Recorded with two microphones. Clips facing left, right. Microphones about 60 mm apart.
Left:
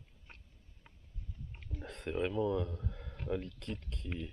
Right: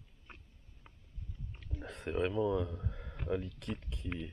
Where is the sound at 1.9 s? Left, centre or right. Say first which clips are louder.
Right 1 dB; centre.